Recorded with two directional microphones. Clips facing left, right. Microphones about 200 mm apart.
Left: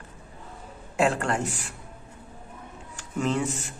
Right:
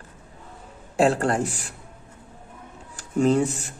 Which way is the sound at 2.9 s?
35° right (ahead or behind).